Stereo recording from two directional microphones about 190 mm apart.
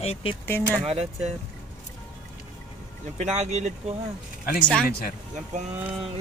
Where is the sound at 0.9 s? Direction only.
35° right (ahead or behind).